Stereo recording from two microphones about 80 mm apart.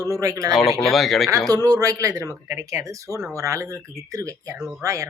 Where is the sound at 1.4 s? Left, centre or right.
Right.